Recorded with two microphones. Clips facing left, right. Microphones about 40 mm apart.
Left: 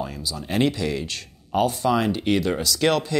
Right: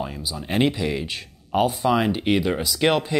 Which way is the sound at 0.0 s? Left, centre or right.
Centre.